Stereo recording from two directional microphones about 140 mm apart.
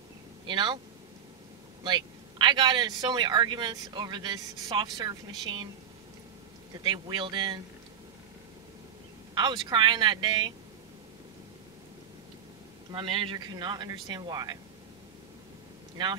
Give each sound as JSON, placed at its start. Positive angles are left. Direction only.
{"t": 0.5, "sound": "a man's voice", "side_deg": -35}
{"t": 1.8, "sound": "a man's voice", "side_deg": -35}
{"t": 6.7, "sound": "a man's voice", "side_deg": -30}
{"t": 9.3, "sound": "a man's voice", "side_deg": -30}
{"t": 12.9, "sound": "a man's voice", "side_deg": -35}